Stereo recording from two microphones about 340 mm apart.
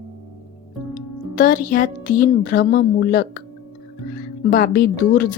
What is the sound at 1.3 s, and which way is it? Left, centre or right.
Speech, left.